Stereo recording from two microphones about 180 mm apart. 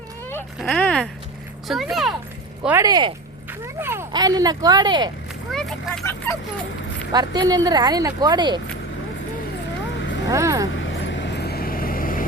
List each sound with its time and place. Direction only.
0.3 s a sound: 10° left (ahead or behind)
0.7 s speech: 5° left (ahead or behind)
2.6 s speech: 15° right (ahead or behind)
5.5 s vehicle: centre (ahead or behind)
7.1 s speech: 20° right (ahead or behind)
10.2 s speech: 15° right (ahead or behind)
10.7 s vehicle: 90° left; by 12.2 s 50° left (ahead or behind)